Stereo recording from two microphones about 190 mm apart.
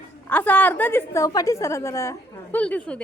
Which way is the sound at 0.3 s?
10° left (ahead or behind).